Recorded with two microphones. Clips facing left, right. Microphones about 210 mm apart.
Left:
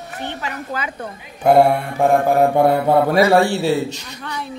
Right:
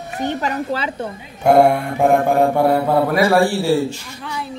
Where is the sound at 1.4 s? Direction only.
Centre (ahead or behind).